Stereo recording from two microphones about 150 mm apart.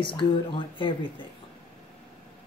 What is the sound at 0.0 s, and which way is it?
Speech, 35° left (ahead or behind).